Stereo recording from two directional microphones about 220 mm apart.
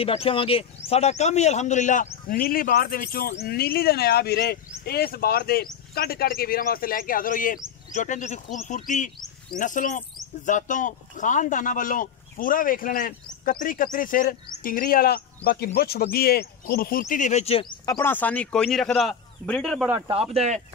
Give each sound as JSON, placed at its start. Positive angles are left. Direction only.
{"t": 0.0, "sound": "speech", "side_deg": 25}
{"t": 20.3, "sound": "speech", "side_deg": -30}